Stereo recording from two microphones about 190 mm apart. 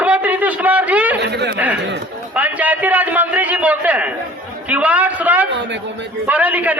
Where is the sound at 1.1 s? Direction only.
60° right (ahead or behind).